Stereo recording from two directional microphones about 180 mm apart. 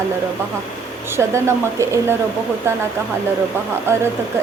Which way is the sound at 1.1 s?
15° right (ahead or behind).